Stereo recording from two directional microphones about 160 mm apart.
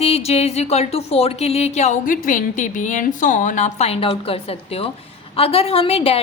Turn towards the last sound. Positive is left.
turn(degrees=35)  # may be behind; listen again after turning